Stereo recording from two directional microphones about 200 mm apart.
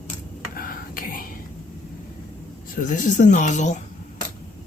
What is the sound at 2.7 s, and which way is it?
Speech, 40° left (ahead or behind).